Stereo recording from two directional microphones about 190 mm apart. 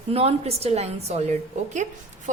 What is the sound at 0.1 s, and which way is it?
A woman's voice, 30° right (ahead or behind).